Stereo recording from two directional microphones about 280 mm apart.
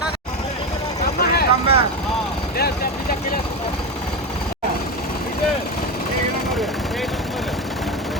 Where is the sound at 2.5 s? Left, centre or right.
Left.